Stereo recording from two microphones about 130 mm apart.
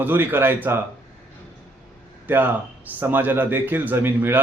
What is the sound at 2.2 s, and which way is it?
A man's voice, 15° right (ahead or behind).